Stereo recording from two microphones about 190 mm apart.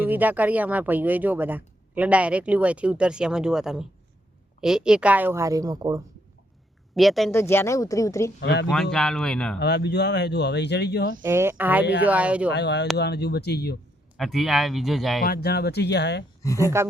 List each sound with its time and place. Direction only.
0.0 s speech: 10° right (ahead or behind)
6.9 s speech: centre (ahead or behind)
7.3 s a woman's voice: 15° left (ahead or behind)
8.4 s speech: 65° left (ahead or behind)
8.7 s speech: 5° left (ahead or behind)
9.6 s speech: 60° left (ahead or behind)
11.2 s speech: 15° right (ahead or behind)
12.5 s speech: 65° left (ahead or behind)
14.2 s speech: centre (ahead or behind)
15.2 s speech: 55° left (ahead or behind)
16.6 s speech: 15° right (ahead or behind)